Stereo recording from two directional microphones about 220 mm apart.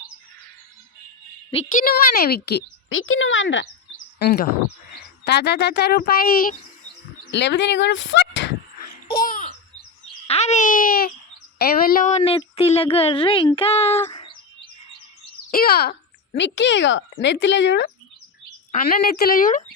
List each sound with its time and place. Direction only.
1.8 s speech: 45° left (ahead or behind)
7.3 s speech: 55° left (ahead or behind)
9.1 s chirp: 40° left (ahead or behind)
10.2 s babbling: 30° left (ahead or behind)
11.6 s speech: 45° left (ahead or behind); by 14.0 s 25° left (ahead or behind)
14.1 s bird: 20° left (ahead or behind)
15.4 s a child's voice: 45° left (ahead or behind)
18.7 s speech: 40° left (ahead or behind)